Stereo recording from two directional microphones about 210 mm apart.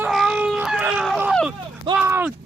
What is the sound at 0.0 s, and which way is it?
Baby cry, centre (ahead or behind).